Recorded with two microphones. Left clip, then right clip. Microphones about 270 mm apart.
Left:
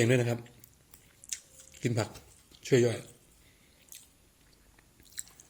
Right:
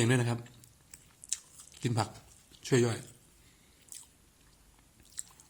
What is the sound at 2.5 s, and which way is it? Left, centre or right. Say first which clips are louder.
Speech: left 3 dB; centre.